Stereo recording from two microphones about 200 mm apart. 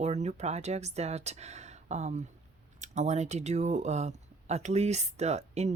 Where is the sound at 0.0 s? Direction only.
35° right (ahead or behind).